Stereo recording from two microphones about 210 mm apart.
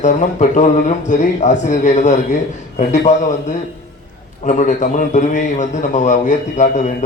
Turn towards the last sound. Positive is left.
turn(degrees=35)  # may be behind; listen again after turning